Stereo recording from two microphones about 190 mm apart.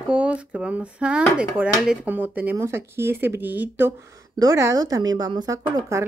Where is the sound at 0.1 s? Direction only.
5° right (ahead or behind).